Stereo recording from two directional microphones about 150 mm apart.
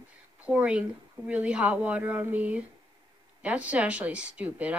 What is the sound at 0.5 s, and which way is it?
Speech, 10° right (ahead or behind).